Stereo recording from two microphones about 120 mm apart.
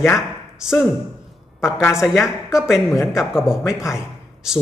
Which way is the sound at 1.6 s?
5° right (ahead or behind).